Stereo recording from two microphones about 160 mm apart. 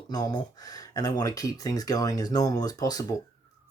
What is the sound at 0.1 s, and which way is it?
Speech, 25° left (ahead or behind).